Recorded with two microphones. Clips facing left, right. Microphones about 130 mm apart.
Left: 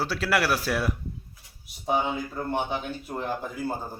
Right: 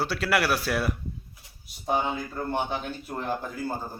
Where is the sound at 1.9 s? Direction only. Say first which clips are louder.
Left 1 dB; 5° left (ahead or behind).